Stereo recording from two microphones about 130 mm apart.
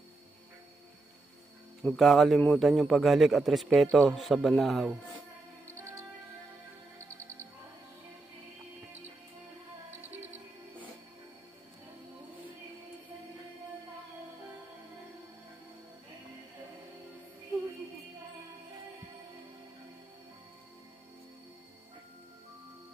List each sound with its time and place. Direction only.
1.8 s a man's voice: centre (ahead or behind)
5.7 s music: 20° right (ahead or behind)
10.0 s music: 15° right (ahead or behind)